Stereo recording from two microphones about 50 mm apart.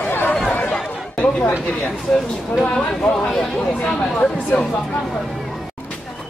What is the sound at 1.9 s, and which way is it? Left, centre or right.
Speech, centre.